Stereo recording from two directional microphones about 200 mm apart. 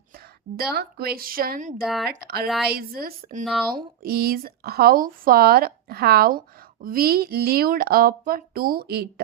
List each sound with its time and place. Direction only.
0.5 s speech: 50° right (ahead or behind)
1.8 s speech: centre (ahead or behind)
2.0 s speech: 50° right (ahead or behind)
3.4 s speech: centre (ahead or behind)
3.7 s speech: 50° right (ahead or behind)